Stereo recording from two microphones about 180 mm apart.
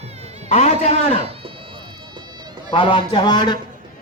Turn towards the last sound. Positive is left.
turn(degrees=25)  # may be behind; listen again after turning